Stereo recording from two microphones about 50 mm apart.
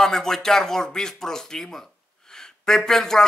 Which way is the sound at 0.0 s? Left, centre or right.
Centre.